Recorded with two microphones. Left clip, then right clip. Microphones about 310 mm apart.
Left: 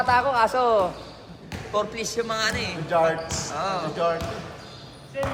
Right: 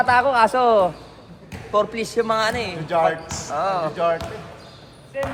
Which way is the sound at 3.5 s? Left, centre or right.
Centre.